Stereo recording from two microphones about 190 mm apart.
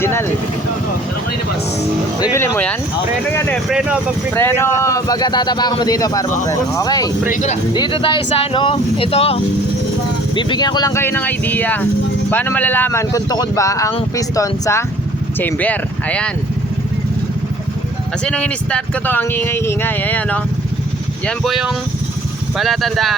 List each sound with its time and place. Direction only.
0.0 s speech: 10° left (ahead or behind)
2.2 s speech: 15° left (ahead or behind)
3.7 s speech: 5° right (ahead or behind)
4.4 s a man's voice: 10° left (ahead or behind)
7.3 s speech: 40° left (ahead or behind)
7.7 s a man's voice: 25° left (ahead or behind); by 16.3 s 5° left (ahead or behind)
18.3 s speech: 5° left (ahead or behind)